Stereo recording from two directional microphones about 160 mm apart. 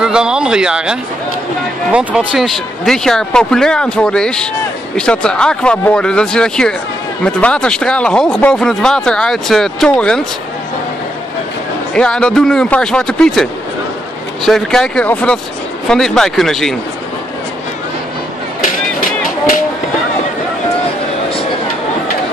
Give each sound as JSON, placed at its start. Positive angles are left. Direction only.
{"t": 0.0, "sound": "speech", "side_deg": -5}
{"t": 11.9, "sound": "speech", "side_deg": 5}
{"t": 18.6, "sound": "a sound", "side_deg": 55}